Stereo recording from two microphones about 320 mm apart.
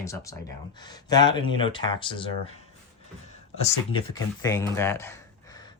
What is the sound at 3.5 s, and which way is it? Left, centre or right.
Speech, centre.